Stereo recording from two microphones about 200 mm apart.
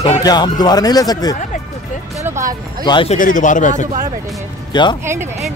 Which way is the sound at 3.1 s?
40° left (ahead or behind).